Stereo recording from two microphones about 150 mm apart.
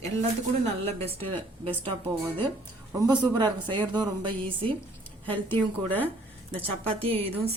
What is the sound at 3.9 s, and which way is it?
Speech, 30° right (ahead or behind).